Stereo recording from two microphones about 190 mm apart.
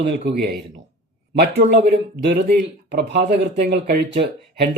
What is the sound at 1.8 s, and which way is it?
Speech, 50° right (ahead or behind).